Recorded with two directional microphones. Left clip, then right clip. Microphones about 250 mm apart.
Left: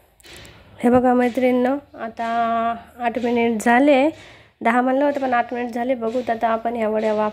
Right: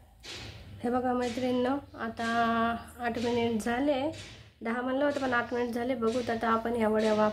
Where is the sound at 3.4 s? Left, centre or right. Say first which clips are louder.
Left 13 dB; left.